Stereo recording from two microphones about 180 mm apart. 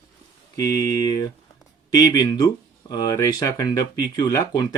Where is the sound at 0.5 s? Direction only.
20° left (ahead or behind).